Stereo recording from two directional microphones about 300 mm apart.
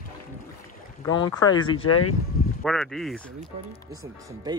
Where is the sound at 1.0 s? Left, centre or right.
Centre.